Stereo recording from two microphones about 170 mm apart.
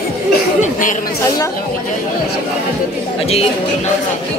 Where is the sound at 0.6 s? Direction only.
50° left (ahead or behind).